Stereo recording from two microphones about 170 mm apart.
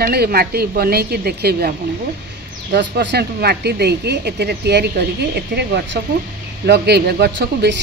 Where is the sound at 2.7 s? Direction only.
80° right.